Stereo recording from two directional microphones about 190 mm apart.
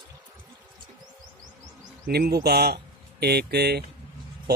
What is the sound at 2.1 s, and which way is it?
Speech, 55° right (ahead or behind).